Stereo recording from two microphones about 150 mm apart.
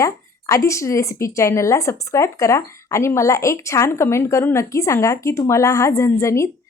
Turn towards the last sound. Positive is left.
turn(degrees=20)  # may be behind; listen again after turning